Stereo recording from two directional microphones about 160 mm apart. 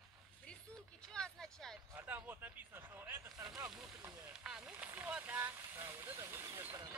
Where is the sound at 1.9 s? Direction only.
10° right (ahead or behind).